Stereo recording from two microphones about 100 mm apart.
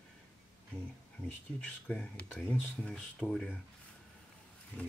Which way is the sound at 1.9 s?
10° left (ahead or behind).